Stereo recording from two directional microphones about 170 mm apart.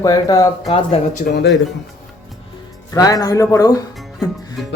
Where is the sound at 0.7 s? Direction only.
35° left (ahead or behind).